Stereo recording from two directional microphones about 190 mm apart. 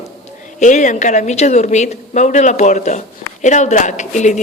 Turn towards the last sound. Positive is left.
turn(degrees=40)  # may be behind; listen again after turning